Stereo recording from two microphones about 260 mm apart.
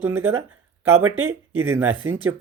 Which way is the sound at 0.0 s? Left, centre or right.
Centre.